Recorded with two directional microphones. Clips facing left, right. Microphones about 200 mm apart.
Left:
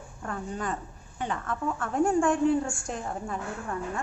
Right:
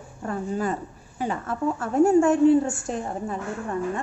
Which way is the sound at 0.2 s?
10° right (ahead or behind).